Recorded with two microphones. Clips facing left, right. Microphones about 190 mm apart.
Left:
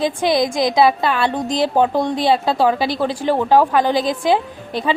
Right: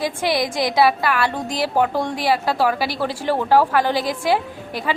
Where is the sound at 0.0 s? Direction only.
20° left (ahead or behind).